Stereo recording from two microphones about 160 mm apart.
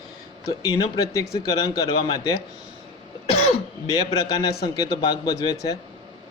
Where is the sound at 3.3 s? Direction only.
40° left (ahead or behind).